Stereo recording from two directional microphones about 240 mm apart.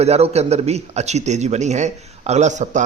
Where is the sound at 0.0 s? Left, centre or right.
Right.